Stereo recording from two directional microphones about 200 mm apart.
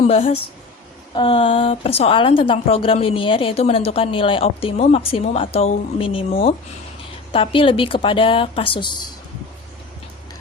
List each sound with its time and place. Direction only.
0.1 s a woman's voice: 30° left (ahead or behind)
7.3 s a woman's voice: 25° left (ahead or behind)